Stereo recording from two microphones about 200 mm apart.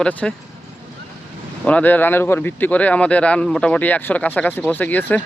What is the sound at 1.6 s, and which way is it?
Speech, 10° left (ahead or behind).